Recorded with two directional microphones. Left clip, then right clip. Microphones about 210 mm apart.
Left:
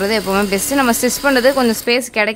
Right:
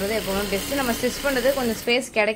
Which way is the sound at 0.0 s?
40° left (ahead or behind).